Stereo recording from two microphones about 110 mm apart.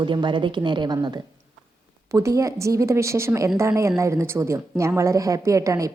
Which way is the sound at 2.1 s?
30° right (ahead or behind).